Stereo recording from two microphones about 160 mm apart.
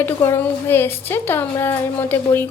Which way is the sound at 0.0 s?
15° left (ahead or behind).